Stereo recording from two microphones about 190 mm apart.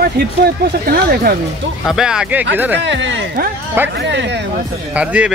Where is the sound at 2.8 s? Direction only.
70° right (ahead or behind).